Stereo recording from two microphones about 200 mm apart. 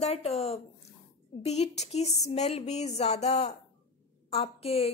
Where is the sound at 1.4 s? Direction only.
30° left (ahead or behind).